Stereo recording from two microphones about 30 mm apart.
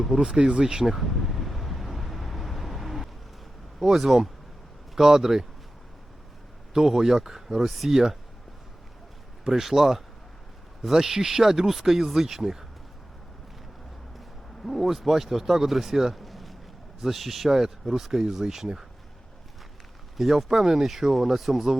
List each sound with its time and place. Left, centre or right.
0.0 s speech: right
0.9 s speech: centre
1.1 s vehicle: centre
3.8 s speech: centre
6.7 s speech: centre
9.4 s speech: centre
14.6 s speech: centre
16.1 s a sound: centre
17.0 s speech: centre
18.2 s speech: centre
20.1 s speech: centre